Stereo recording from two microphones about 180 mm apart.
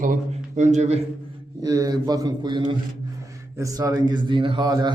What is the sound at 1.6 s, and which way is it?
Speech, 20° right (ahead or behind).